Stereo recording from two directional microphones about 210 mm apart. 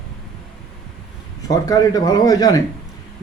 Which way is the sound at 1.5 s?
15° left (ahead or behind).